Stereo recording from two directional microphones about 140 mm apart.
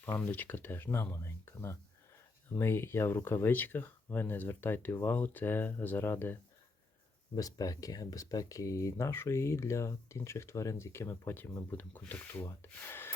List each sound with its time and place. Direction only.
0.0 s speech: 15° left (ahead or behind)